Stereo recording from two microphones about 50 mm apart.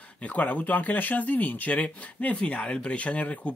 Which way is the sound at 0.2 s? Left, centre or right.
Left.